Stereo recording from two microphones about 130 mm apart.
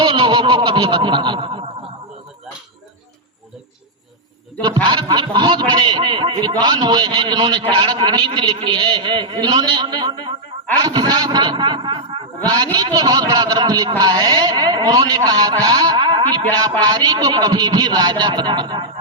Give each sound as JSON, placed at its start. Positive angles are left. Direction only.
{"t": 0.0, "sound": "snicker", "side_deg": -35}
{"t": 4.9, "sound": "a man's voice", "side_deg": -35}